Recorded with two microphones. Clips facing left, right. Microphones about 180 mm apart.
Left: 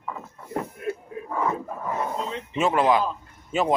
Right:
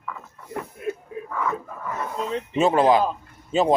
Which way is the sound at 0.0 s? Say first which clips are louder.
Left 2 dB; 30° left (ahead or behind).